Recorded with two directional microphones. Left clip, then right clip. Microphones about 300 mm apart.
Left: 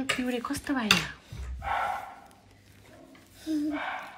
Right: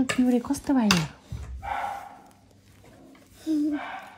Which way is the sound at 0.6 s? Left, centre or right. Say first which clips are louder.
Left 1 dB; right.